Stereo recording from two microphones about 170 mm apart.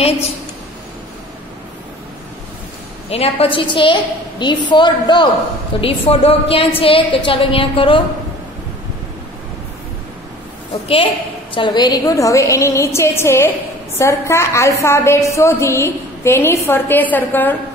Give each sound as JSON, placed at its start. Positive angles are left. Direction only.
{"t": 3.1, "sound": "a woman's voice", "side_deg": 35}
{"t": 10.7, "sound": "a woman's voice", "side_deg": 30}